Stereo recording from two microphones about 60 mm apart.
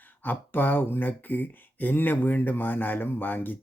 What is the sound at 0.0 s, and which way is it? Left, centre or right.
Speech, left.